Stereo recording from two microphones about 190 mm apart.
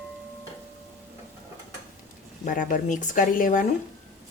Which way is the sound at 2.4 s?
45° left (ahead or behind).